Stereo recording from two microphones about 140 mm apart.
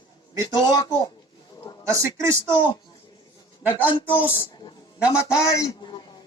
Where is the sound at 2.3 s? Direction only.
35° left (ahead or behind).